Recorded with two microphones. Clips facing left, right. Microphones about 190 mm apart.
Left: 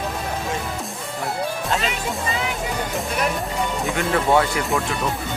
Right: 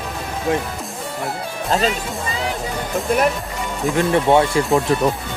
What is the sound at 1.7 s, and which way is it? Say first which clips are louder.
Speech: right 8 dB; 35° right (ahead or behind).